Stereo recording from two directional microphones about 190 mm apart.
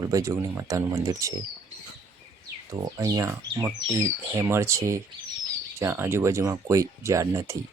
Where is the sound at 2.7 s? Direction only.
20° right (ahead or behind).